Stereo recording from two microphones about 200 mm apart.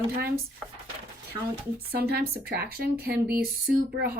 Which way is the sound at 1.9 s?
50° right (ahead or behind).